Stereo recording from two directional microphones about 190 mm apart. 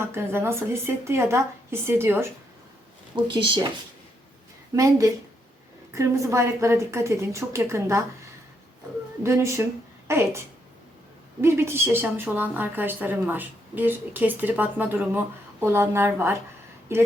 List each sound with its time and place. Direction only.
0.0 s a woman's voice: 15° right (ahead or behind)
3.2 s speech: 25° right (ahead or behind)
4.7 s a woman's voice: 15° right (ahead or behind)
9.2 s a woman's voice: 15° right (ahead or behind)